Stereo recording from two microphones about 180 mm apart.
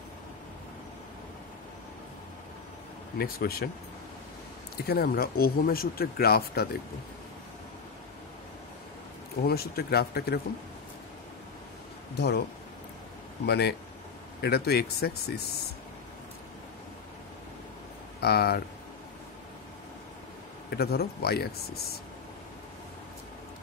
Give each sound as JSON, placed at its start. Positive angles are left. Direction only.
{"t": 3.2, "sound": "speech", "side_deg": 60}
{"t": 4.7, "sound": "speech", "side_deg": 60}
{"t": 9.4, "sound": "speech", "side_deg": 60}
{"t": 13.5, "sound": "speech", "side_deg": 65}
{"t": 18.2, "sound": "speech", "side_deg": 60}
{"t": 20.7, "sound": "speech", "side_deg": 60}